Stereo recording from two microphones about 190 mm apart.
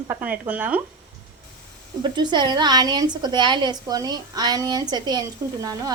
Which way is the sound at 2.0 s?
25° right (ahead or behind).